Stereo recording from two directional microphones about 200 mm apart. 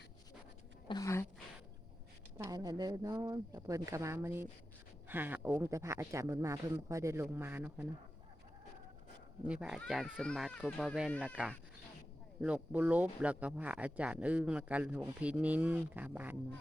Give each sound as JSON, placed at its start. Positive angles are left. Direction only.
{"t": 0.9, "sound": "speech", "side_deg": 15}
{"t": 2.4, "sound": "speech", "side_deg": -20}
{"t": 9.4, "sound": "speech", "side_deg": -5}
{"t": 12.4, "sound": "speech", "side_deg": -5}